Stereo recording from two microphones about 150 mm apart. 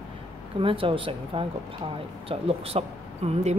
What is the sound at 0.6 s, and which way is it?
A woman's voice, 35° right (ahead or behind).